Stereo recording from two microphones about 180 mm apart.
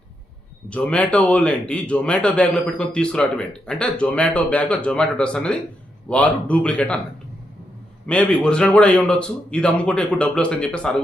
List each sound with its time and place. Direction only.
0.7 s a man's voice: 5° left (ahead or behind)
8.0 s a man's voice: 5° left (ahead or behind)